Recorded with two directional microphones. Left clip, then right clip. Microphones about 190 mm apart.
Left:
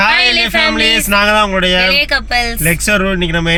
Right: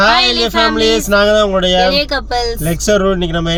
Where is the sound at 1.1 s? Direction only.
45° left (ahead or behind).